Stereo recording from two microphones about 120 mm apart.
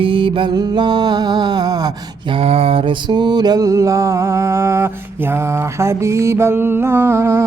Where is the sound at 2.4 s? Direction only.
55° right (ahead or behind); by 7.4 s 25° right (ahead or behind).